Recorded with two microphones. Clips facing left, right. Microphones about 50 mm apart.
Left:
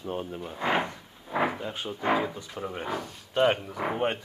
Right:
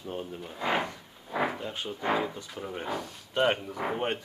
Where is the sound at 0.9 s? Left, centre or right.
Centre.